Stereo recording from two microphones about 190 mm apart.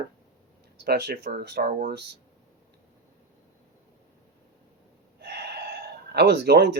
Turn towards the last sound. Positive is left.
turn(degrees=-60)  # may be behind; listen again after turning